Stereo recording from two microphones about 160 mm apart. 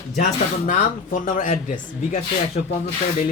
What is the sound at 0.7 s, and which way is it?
Speech, 55° left (ahead or behind).